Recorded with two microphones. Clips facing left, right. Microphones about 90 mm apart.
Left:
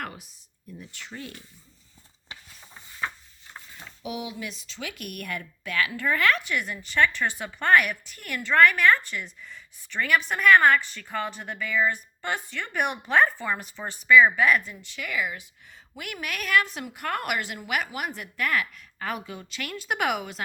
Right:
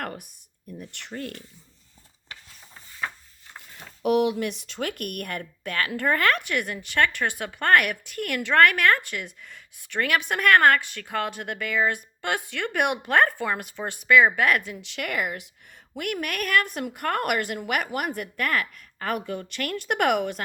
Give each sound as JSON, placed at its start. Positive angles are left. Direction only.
{"t": 0.0, "sound": "a sound", "side_deg": -50}
{"t": 0.8, "sound": "speech", "side_deg": -55}
{"t": 4.0, "sound": "a woman's voice", "side_deg": -65}